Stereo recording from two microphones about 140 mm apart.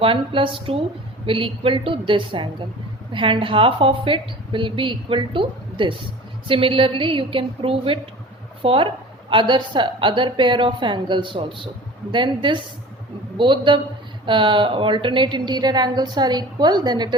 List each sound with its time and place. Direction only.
0.0 s a woman's voice: 40° right (ahead or behind)